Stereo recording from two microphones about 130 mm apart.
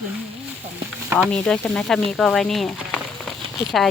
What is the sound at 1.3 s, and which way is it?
Speech, 5° left (ahead or behind).